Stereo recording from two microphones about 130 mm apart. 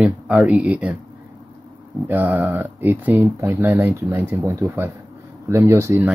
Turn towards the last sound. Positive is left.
turn(degrees=-20)  # may be behind; listen again after turning